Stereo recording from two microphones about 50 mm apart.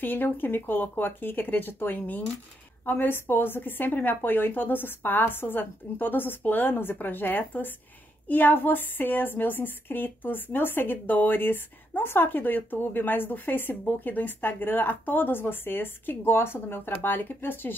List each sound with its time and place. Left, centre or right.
0.0 s a woman's voice: left